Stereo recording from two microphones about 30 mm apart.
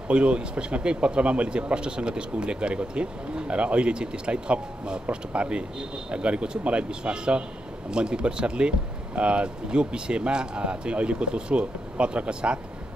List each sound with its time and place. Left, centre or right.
0.1 s speech: right